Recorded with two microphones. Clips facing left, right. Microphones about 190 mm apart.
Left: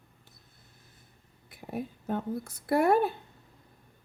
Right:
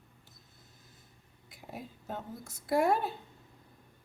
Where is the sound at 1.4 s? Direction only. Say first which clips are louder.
Left 8 dB; 60° left (ahead or behind).